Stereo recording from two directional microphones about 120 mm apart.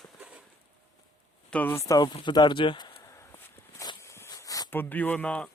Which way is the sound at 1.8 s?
30° left (ahead or behind).